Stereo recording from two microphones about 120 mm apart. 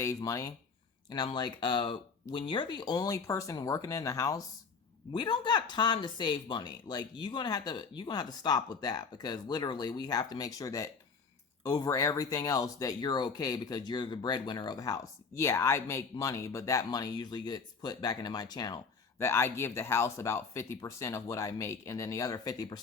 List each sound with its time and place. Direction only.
0.0 s speech: 30° left (ahead or behind)
5.1 s speech: 40° left (ahead or behind)
19.2 s speech: 20° left (ahead or behind)